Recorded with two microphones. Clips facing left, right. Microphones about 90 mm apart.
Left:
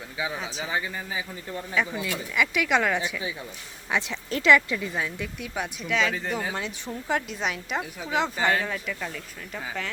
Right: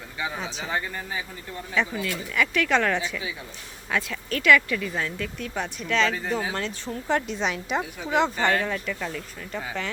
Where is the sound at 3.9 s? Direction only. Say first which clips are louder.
Even; 20° left (ahead or behind); by 6.5 s centre (ahead or behind).